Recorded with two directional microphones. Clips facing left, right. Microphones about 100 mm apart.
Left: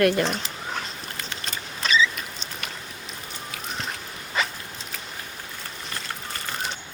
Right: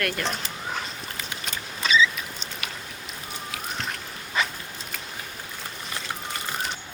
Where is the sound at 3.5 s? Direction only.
Centre (ahead or behind).